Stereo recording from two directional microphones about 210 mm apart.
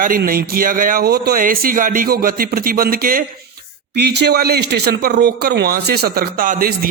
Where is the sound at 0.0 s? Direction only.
40° right (ahead or behind).